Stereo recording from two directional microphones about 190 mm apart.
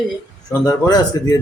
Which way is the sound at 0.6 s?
20° left (ahead or behind).